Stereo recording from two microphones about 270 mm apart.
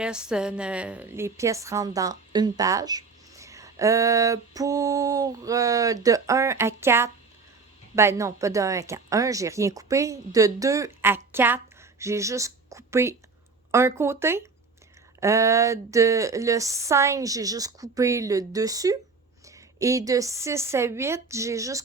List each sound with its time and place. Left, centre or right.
0.0 s a woman's voice: centre